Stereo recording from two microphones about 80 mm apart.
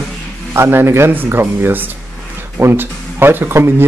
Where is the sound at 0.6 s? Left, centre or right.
Right.